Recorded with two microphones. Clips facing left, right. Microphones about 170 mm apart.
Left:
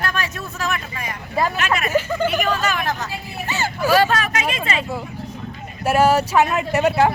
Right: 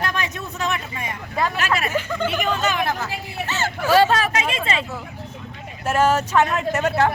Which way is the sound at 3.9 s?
25° right (ahead or behind).